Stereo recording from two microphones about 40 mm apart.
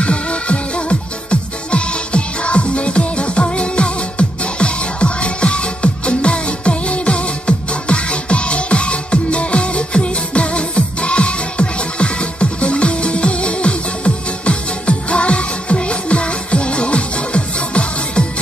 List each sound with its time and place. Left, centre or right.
0.0 s music: left